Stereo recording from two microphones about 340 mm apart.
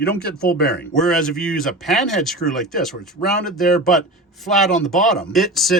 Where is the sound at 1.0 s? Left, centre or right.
Centre.